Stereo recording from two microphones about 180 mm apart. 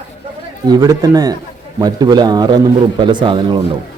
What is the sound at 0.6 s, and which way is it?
A man's voice, 20° right (ahead or behind).